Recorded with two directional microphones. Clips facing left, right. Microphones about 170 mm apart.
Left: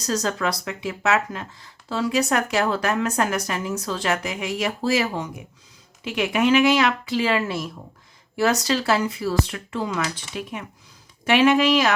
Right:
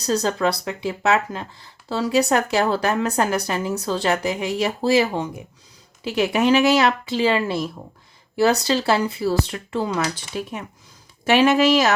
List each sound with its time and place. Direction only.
0.0 s speech: 30° right (ahead or behind)